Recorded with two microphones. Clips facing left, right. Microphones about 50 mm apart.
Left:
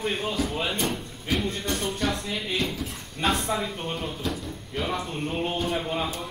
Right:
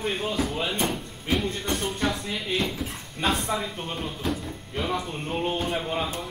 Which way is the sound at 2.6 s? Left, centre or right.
Centre.